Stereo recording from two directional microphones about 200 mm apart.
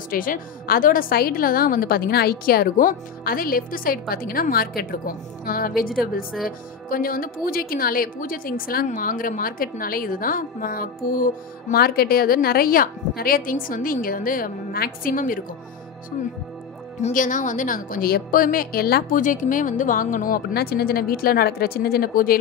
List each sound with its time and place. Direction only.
0.1 s speech: 45° left (ahead or behind)
17.0 s speech: 40° left (ahead or behind)